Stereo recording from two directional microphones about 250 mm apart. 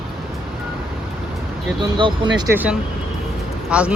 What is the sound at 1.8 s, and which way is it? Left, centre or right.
Speech, centre.